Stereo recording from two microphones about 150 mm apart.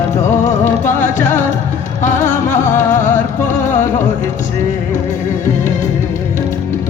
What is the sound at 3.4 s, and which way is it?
Music, 55° left (ahead or behind).